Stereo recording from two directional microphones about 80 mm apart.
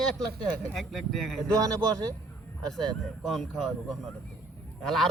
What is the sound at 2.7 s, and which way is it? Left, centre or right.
A man's voice, centre.